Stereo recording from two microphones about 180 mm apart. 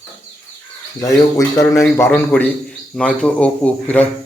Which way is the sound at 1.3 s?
15° left (ahead or behind).